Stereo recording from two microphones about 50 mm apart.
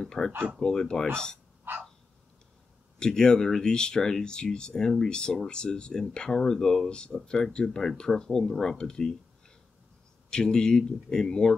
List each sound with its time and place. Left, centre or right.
0.0 s speech: centre
1.7 s dog: right
3.0 s speech: centre
10.3 s speech: centre